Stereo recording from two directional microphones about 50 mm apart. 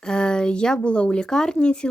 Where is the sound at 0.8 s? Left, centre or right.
Left.